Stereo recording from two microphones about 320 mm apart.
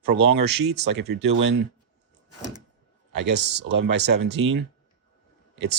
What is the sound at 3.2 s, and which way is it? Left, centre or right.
Speech, right.